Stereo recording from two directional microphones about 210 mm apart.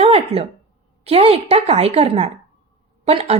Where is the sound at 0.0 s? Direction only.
30° right (ahead or behind).